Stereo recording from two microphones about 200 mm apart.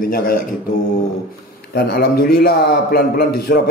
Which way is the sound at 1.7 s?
50° left (ahead or behind).